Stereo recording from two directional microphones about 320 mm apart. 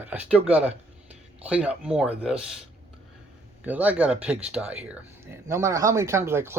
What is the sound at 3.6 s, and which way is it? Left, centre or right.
Speech, centre.